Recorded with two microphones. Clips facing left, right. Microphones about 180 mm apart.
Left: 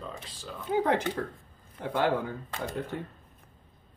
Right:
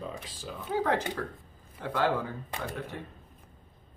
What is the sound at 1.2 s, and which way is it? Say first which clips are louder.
Speech: left 2 dB; 20° left (ahead or behind).